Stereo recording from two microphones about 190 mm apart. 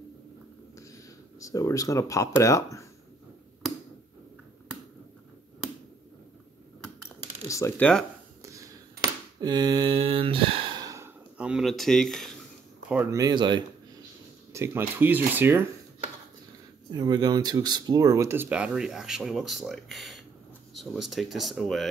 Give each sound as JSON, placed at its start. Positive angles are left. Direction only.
{"t": 0.7, "sound": "speech", "side_deg": 15}
{"t": 7.4, "sound": "speech", "side_deg": 15}
{"t": 8.4, "sound": "a sound", "side_deg": -15}
{"t": 11.3, "sound": "speech", "side_deg": -5}
{"t": 12.9, "sound": "speech", "side_deg": -15}
{"t": 16.9, "sound": "speech", "side_deg": -20}